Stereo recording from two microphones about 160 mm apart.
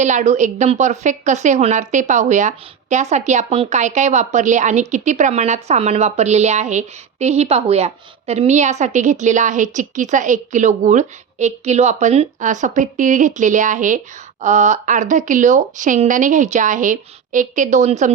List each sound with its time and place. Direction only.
0.0 s a woman's voice: 50° right (ahead or behind)